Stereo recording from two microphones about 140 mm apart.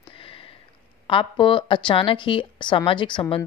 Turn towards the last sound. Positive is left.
turn(degrees=35)  # may be behind; listen again after turning